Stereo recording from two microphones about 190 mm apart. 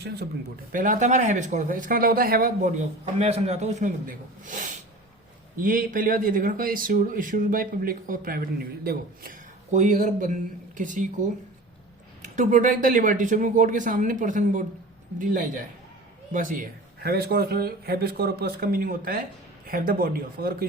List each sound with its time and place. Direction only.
0.7 s speech: 45° right (ahead or behind)
12.2 s speech: 40° right (ahead or behind)